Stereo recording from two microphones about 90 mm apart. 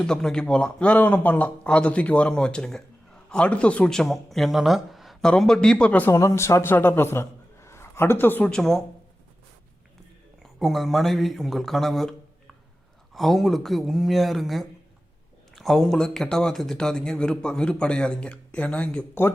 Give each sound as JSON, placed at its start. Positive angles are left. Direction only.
{"t": 0.0, "sound": "speech", "side_deg": 5}
{"t": 6.1, "sound": "a man's voice", "side_deg": 35}
{"t": 8.4, "sound": "speech", "side_deg": 5}
{"t": 10.4, "sound": "speech", "side_deg": 0}
{"t": 13.1, "sound": "speech", "side_deg": 0}